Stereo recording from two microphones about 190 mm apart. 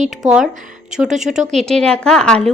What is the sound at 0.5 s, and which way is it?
Speech, 45° right (ahead or behind).